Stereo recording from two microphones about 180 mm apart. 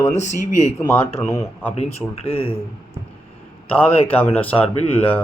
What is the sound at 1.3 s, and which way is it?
Speech, 10° left (ahead or behind).